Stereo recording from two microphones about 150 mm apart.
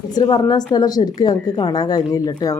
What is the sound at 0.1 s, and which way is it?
A woman's voice, 25° left (ahead or behind).